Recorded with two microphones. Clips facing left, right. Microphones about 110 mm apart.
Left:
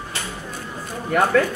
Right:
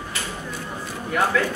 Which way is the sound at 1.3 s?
45° left (ahead or behind).